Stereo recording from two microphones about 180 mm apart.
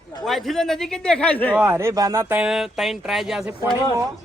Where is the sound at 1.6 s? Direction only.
15° right (ahead or behind).